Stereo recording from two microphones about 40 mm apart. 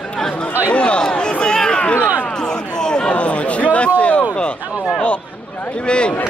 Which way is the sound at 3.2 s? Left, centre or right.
Left.